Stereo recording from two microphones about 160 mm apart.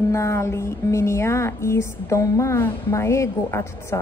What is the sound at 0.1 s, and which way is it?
A woman's voice, 15° left (ahead or behind).